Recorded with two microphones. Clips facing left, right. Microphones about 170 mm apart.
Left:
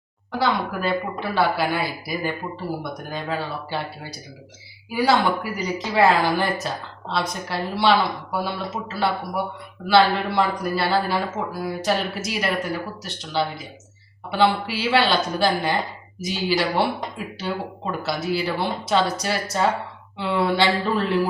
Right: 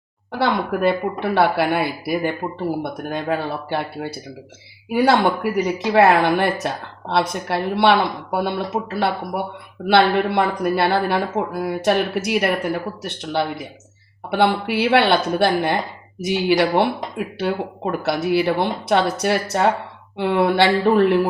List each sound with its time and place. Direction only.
0.3 s speech: 60° right (ahead or behind)